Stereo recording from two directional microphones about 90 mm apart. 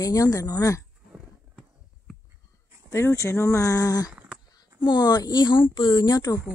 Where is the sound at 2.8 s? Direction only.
30° left (ahead or behind).